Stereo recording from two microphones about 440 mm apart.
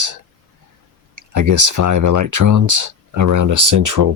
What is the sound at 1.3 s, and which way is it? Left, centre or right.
Speech, right.